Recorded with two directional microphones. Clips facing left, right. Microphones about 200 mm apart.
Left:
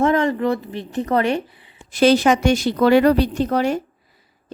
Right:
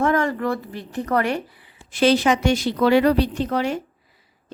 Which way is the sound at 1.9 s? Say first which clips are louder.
Left 3 dB; 45° left (ahead or behind).